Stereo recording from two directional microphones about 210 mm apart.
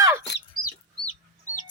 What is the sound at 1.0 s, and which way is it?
Chicken, 35° left (ahead or behind).